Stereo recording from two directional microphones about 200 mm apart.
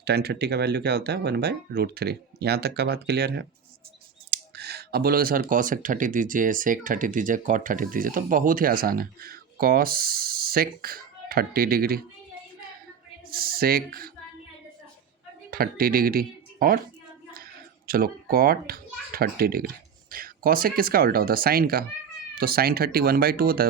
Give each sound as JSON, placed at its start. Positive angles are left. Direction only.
{"t": 0.0, "sound": "speech", "side_deg": -55}
{"t": 13.3, "sound": "speech", "side_deg": -45}
{"t": 15.4, "sound": "a child's voice", "side_deg": -50}